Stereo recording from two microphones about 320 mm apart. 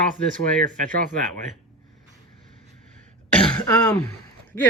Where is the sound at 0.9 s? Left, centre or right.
Right.